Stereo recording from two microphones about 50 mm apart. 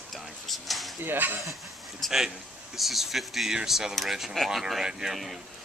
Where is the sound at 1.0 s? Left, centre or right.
Right.